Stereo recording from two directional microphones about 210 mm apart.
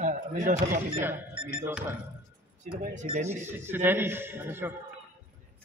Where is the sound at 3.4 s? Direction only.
10° right (ahead or behind).